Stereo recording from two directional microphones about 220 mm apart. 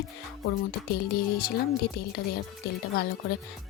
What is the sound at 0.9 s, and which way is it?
Speech, 45° left (ahead or behind).